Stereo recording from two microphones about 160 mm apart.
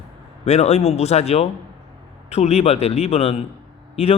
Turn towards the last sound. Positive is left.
turn(degrees=40)  # may be behind; listen again after turning